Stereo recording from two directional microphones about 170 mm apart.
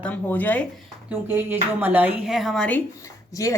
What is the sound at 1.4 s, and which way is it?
Cutlery, 10° right (ahead or behind).